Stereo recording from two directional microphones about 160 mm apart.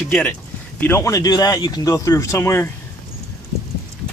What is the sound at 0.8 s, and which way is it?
Speech, 15° left (ahead or behind).